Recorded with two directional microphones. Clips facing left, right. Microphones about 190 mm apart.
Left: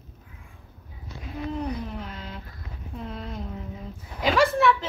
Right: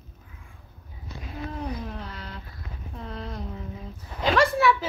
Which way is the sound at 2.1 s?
20° left (ahead or behind).